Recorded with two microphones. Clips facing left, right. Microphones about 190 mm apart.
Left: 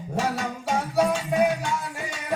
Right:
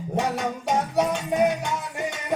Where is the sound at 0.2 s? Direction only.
20° right (ahead or behind).